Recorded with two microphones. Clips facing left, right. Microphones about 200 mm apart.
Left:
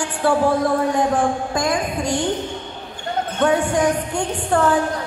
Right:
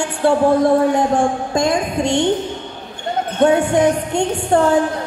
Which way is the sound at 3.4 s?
25° right (ahead or behind).